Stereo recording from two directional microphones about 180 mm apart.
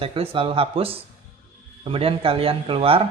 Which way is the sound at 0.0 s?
30° right (ahead or behind).